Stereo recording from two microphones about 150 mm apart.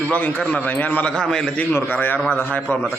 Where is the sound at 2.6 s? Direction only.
Centre (ahead or behind).